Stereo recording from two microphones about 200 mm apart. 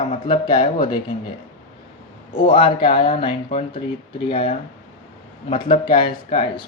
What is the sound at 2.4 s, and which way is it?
Speech, 25° left (ahead or behind).